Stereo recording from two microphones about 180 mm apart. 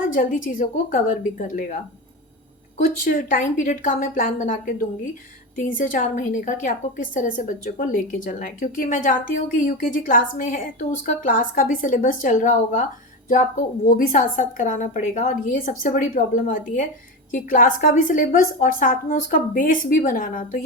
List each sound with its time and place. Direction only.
0.1 s a woman's voice: 50° left (ahead or behind)
2.8 s a woman's voice: 45° left (ahead or behind)